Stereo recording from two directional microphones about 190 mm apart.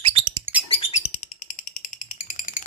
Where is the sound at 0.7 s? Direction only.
35° left (ahead or behind).